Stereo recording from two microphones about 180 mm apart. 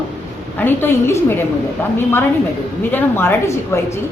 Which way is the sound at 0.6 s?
10° left (ahead or behind).